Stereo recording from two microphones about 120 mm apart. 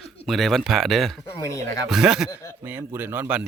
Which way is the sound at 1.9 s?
5° right (ahead or behind).